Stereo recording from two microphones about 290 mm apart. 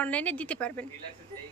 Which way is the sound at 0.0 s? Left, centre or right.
Centre.